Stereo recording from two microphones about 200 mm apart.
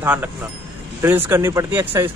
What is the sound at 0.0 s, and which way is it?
Speech, 5° right (ahead or behind).